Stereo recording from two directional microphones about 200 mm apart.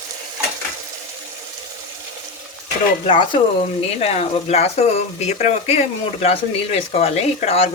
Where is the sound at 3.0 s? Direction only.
25° left (ahead or behind).